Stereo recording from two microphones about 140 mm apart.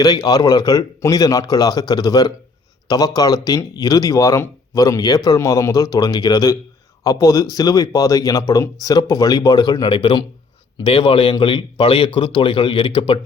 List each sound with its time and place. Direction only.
0.0 s a man's voice: 30° left (ahead or behind)